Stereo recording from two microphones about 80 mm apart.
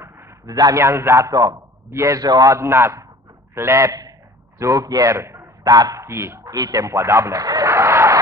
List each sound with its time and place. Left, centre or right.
0.5 s a man's voice: right
0.8 s a man's voice: right
5.7 s a man's voice: right
6.0 s speech: right
6.5 s a man's voice: right